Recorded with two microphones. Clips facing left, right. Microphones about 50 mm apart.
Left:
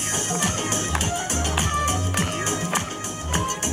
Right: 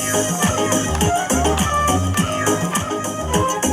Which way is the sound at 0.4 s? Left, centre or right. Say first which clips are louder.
Right 7 dB; right.